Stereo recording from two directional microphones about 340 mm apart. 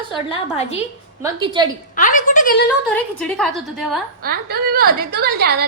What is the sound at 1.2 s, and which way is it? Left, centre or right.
Speech, centre.